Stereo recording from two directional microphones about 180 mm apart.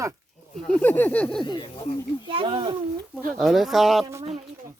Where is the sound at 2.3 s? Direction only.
30° right (ahead or behind).